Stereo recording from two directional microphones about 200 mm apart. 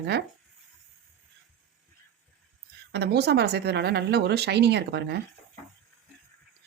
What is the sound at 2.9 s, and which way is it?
Speech, 55° right (ahead or behind).